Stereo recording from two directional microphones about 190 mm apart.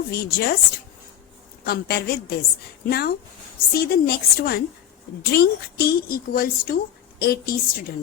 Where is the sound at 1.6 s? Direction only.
55° left (ahead or behind).